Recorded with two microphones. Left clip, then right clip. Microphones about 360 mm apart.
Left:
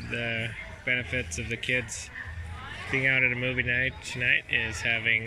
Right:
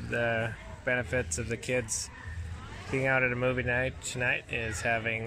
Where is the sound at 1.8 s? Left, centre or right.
Centre.